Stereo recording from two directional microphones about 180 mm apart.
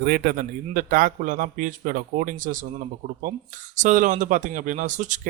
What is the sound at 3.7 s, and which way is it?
Speech, 45° right (ahead or behind).